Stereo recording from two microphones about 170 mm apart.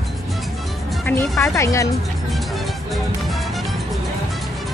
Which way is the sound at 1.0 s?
15° left (ahead or behind).